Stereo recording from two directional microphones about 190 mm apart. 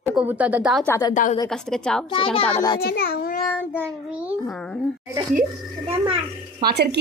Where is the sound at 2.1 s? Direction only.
30° left (ahead or behind).